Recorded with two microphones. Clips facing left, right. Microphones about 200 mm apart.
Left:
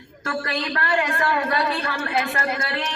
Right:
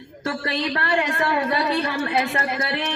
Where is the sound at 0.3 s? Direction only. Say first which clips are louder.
Right 2 dB; 25° right (ahead or behind).